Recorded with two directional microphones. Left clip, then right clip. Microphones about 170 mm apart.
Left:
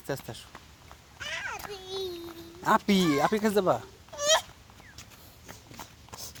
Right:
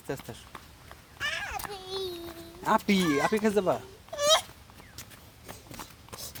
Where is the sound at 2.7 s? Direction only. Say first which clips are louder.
Left 1 dB; 50° left (ahead or behind).